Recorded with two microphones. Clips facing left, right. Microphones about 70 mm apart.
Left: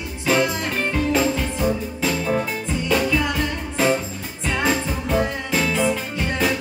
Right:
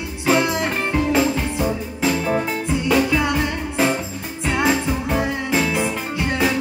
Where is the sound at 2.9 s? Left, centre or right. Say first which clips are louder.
Right 2 dB; centre.